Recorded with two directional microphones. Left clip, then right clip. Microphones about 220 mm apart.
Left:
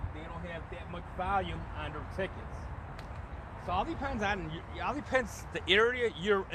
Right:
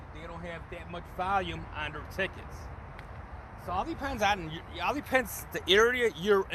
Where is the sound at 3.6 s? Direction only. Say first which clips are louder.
Even; 20° right (ahead or behind); by 6.2 s 40° right (ahead or behind).